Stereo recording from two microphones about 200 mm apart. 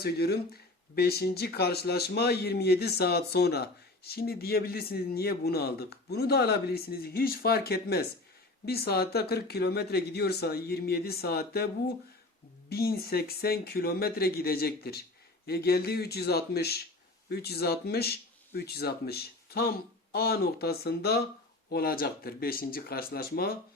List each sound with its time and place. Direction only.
0.0 s speech: 50° left (ahead or behind)
12.7 s speech: 50° left (ahead or behind)